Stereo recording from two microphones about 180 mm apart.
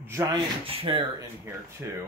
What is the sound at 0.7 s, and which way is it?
Speech, 30° right (ahead or behind).